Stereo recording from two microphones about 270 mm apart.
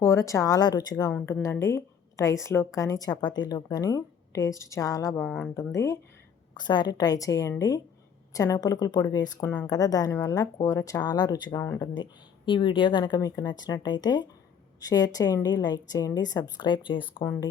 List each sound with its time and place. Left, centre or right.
0.0 s a woman's voice: centre